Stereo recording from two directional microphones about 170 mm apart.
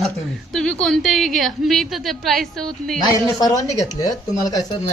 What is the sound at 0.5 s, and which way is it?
A woman's voice, 5° left (ahead or behind).